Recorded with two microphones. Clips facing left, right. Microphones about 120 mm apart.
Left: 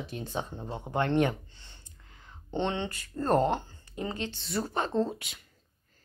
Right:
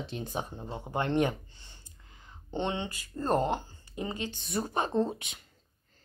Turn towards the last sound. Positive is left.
turn(degrees=-20)  # may be behind; listen again after turning